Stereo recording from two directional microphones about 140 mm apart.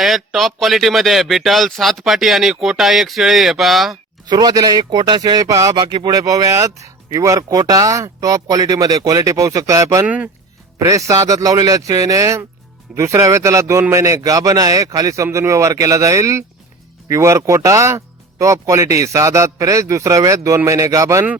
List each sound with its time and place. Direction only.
0.0 s speech: centre (ahead or behind)
4.3 s speech: 30° right (ahead or behind)